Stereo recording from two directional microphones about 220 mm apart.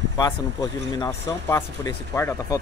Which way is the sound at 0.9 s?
15° left (ahead or behind).